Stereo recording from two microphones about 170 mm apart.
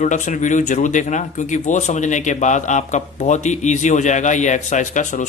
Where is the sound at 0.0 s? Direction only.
45° left (ahead or behind).